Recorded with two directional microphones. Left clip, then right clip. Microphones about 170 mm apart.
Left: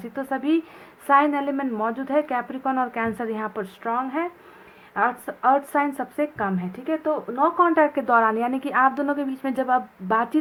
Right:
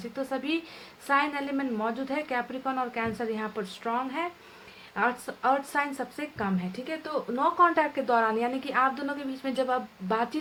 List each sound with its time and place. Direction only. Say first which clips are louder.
0.3 s a woman's voice: left 10 dB; 35° left (ahead or behind)